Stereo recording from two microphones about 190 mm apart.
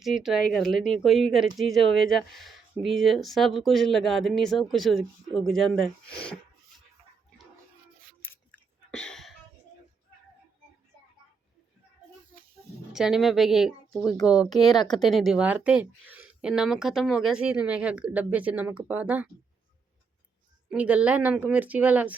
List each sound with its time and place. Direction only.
0.0 s speech: centre (ahead or behind)
8.2 s chewing: 10° left (ahead or behind)
12.9 s speech: centre (ahead or behind)
14.5 s speech: 20° left (ahead or behind)
14.8 s speech: centre (ahead or behind)
20.7 s speech: 5° right (ahead or behind)